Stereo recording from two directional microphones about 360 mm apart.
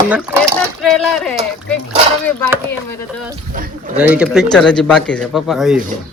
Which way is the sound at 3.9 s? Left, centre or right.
Centre.